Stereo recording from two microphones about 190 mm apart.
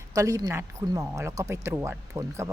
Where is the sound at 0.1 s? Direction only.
15° right (ahead or behind).